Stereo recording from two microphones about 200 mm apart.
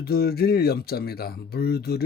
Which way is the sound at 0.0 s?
50° left (ahead or behind).